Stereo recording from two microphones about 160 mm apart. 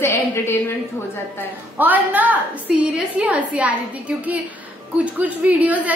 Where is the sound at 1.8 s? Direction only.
10° right (ahead or behind).